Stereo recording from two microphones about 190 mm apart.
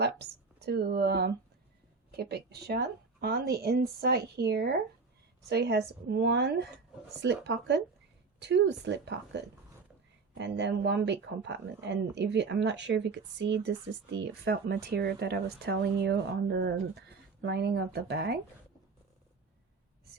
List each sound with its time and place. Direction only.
0.0 s speech: 60° right (ahead or behind)